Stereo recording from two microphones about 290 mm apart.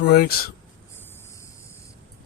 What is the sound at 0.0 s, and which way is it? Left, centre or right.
Speech, left.